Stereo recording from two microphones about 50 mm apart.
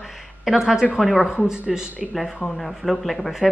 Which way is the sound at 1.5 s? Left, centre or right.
Centre.